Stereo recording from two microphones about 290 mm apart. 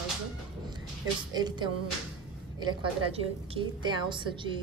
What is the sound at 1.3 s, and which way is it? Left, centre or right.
Speech, centre.